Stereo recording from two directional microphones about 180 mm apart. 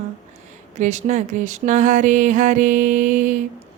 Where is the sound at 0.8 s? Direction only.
40° right (ahead or behind).